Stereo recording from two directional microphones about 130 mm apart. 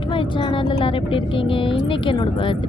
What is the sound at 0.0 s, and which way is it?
Speech, 40° left (ahead or behind).